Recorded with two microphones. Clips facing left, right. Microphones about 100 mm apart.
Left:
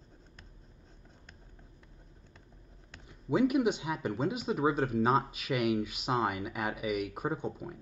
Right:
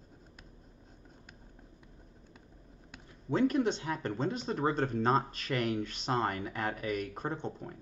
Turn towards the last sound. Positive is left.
turn(degrees=10)  # may be behind; listen again after turning